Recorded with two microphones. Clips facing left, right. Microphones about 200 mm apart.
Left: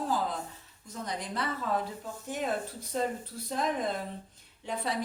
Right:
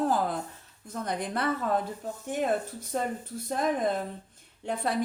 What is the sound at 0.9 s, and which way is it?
Speech, 55° right (ahead or behind).